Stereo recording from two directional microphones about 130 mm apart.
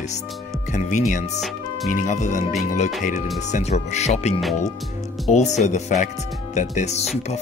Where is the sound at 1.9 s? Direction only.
80° left.